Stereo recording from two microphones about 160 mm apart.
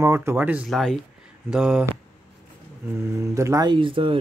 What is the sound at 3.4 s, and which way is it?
Speech, 20° right (ahead or behind).